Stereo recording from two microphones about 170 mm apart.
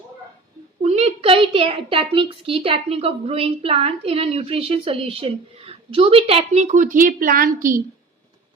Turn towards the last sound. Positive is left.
turn(degrees=-55)  # may be behind; listen again after turning